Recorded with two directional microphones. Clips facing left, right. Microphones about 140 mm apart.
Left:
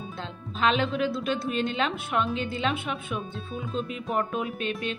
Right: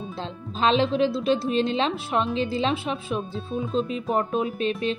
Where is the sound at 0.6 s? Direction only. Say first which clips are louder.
Right 4 dB; 30° right (ahead or behind).